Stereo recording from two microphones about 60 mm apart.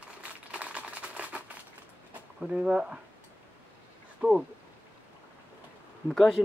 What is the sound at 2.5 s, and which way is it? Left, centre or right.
Speech, centre.